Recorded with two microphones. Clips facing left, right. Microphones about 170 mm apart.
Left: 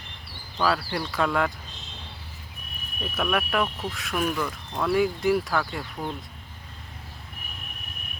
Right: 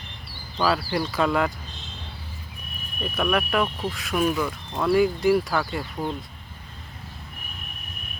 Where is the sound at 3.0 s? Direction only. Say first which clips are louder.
Right 3 dB; centre (ahead or behind).